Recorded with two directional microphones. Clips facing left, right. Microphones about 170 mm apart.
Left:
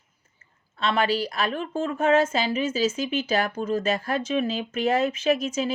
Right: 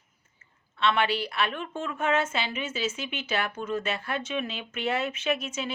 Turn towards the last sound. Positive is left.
turn(degrees=40)  # may be behind; listen again after turning